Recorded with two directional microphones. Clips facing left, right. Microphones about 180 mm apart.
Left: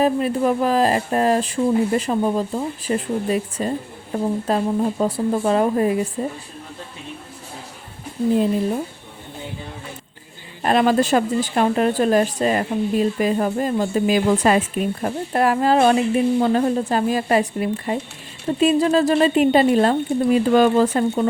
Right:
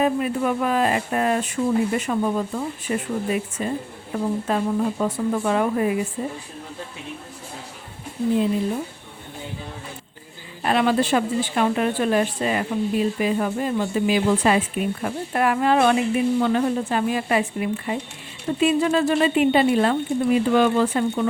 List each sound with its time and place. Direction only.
0.0 s a woman's voice: 35° left (ahead or behind)
10.6 s a woman's voice: 40° left (ahead or behind)